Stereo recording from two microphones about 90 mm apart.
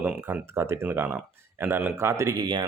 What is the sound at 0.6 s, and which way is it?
Speech, 30° right (ahead or behind).